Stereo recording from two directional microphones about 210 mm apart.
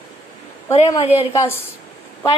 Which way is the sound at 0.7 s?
30° left (ahead or behind).